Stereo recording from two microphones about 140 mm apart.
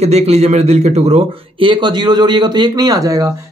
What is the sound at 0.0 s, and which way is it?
A man's voice, 50° right (ahead or behind).